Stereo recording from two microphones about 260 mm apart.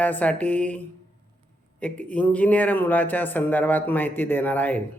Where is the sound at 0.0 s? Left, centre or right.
Centre.